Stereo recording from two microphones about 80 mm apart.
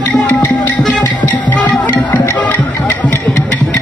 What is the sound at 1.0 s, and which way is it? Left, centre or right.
Music, left.